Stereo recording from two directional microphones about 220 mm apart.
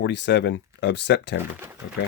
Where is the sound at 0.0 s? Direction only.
50° left (ahead or behind).